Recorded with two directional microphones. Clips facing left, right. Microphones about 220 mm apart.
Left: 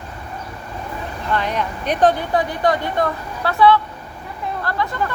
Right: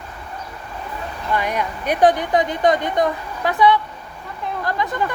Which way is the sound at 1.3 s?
10° right (ahead or behind).